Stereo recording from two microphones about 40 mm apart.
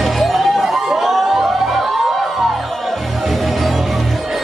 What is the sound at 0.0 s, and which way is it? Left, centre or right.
Music, centre.